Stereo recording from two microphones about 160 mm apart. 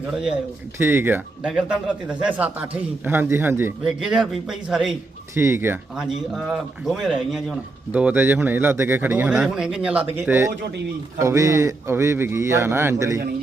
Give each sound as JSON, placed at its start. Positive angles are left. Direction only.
{"t": 0.1, "sound": "speech", "side_deg": -5}
{"t": 3.8, "sound": "speech", "side_deg": -5}
{"t": 5.3, "sound": "speech", "side_deg": -15}
{"t": 6.3, "sound": "speech", "side_deg": -5}